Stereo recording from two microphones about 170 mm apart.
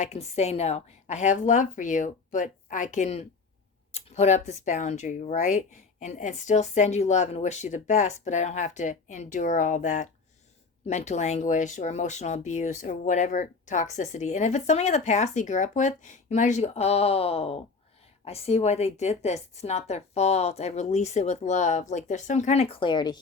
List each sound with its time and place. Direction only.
0.0 s speech: 40° left (ahead or behind)